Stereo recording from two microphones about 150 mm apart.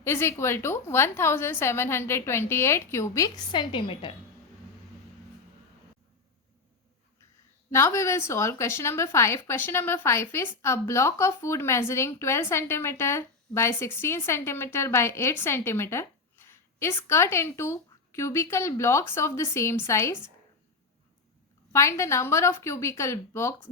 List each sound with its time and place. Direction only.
0.0 s a woman's voice: 15° left (ahead or behind); by 4.1 s 35° left (ahead or behind)
7.7 s a woman's voice: 20° left (ahead or behind)
21.7 s a woman's voice: 20° left (ahead or behind)